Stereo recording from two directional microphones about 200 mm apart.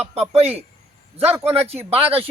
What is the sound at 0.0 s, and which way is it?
Speech, 30° right (ahead or behind).